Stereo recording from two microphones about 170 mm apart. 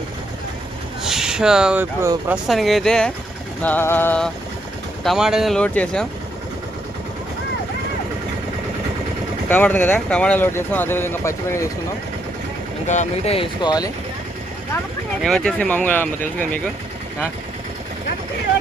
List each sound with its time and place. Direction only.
1.0 s speech: 5° right (ahead or behind)
2.5 s speech: centre (ahead or behind)
5.0 s speech: 5° right (ahead or behind)
9.5 s speech: 10° left (ahead or behind)
12.9 s speech: 40° left (ahead or behind); by 13.9 s 25° left (ahead or behind)
15.2 s speech: 5° left (ahead or behind)